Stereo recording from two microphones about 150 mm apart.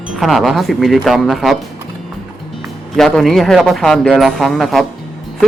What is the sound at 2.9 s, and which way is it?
Speech, centre (ahead or behind).